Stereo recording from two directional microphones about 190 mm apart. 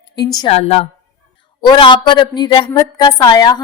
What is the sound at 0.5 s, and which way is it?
A woman's voice, 30° left (ahead or behind).